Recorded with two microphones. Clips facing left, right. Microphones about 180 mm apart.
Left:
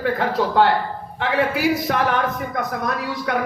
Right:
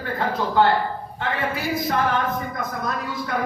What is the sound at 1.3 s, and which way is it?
A man's voice, 70° left (ahead or behind).